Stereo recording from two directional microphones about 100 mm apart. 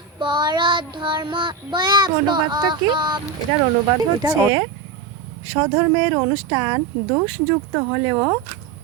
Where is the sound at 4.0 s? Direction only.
35° right (ahead or behind).